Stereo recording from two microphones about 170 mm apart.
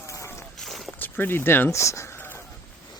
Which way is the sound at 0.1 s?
15° left (ahead or behind).